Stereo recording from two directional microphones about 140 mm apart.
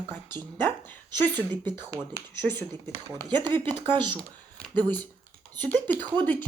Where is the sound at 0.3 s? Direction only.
15° left (ahead or behind).